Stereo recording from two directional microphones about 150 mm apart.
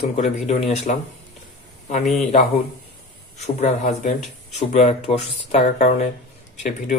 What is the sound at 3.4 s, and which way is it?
Speech, 50° left (ahead or behind).